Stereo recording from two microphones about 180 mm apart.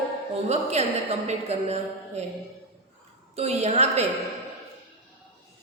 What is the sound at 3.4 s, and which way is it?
Speech, 35° right (ahead or behind).